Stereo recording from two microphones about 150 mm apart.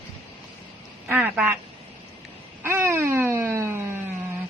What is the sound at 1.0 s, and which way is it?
Speech, 10° right (ahead or behind).